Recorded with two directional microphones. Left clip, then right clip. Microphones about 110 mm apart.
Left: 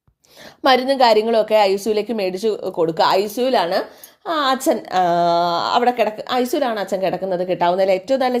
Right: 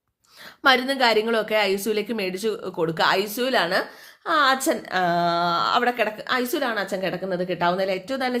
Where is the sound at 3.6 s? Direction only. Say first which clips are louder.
Left 3 dB; 30° left (ahead or behind).